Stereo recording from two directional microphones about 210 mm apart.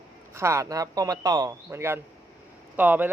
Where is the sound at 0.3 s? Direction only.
15° right (ahead or behind).